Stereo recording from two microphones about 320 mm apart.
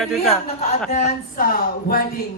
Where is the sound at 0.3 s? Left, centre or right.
Centre.